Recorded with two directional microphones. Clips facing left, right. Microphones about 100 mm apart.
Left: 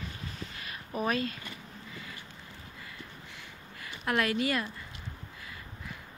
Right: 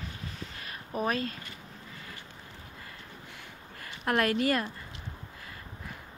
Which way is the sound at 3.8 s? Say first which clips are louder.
Right 2 dB; 45° right (ahead or behind).